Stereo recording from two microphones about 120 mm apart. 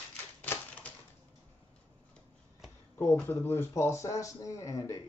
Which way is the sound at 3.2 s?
15° left (ahead or behind).